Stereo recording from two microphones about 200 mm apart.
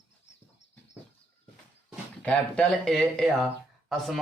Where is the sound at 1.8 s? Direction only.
5° left (ahead or behind).